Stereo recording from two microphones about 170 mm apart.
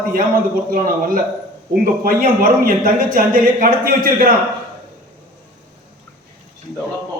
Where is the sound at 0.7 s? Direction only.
55° right (ahead or behind).